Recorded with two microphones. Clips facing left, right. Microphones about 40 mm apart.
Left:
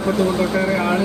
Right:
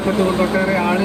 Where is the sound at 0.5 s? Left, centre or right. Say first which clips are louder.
Right 2 dB; right.